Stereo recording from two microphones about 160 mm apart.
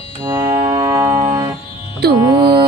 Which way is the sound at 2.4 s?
30° right (ahead or behind).